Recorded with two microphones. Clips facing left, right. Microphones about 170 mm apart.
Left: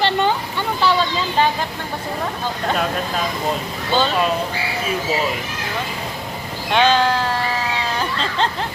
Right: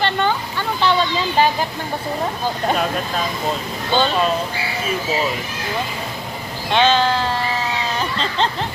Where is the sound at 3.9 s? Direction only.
5° left (ahead or behind).